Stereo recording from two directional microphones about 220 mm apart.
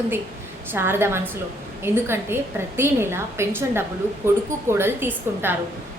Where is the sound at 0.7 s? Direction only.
10° right (ahead or behind).